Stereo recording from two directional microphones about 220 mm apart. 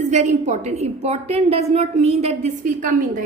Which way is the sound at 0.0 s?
30° right (ahead or behind).